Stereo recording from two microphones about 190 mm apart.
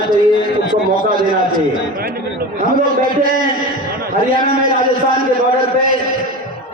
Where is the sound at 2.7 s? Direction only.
45° right (ahead or behind).